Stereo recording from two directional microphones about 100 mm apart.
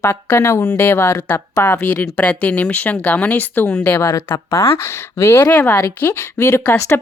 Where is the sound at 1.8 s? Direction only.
15° left (ahead or behind).